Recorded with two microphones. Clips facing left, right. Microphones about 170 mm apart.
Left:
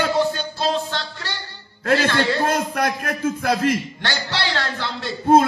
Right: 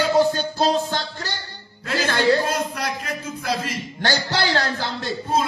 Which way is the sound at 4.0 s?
45° right (ahead or behind).